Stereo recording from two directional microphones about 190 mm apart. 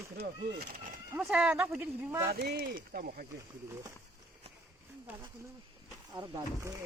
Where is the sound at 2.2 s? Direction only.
55° right (ahead or behind).